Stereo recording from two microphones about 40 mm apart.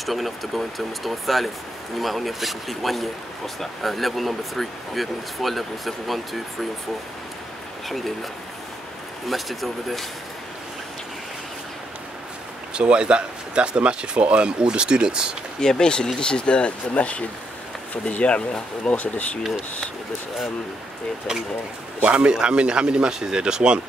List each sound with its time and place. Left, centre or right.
0.0 s speech: centre
7.9 s speech: centre
9.3 s speech: centre
12.7 s speech: right
15.6 s speech: centre
22.0 s speech: right